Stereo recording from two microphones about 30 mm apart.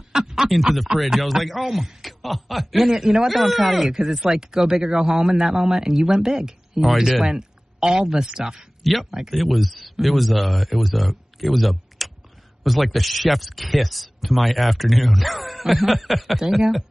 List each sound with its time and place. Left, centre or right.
0.1 s a sound: centre
0.5 s speech: centre
2.9 s speech: centre
3.3 s speech: centre
3.9 s speech: centre
8.8 s speech: centre
12.0 s a sound: centre
12.6 s speech: centre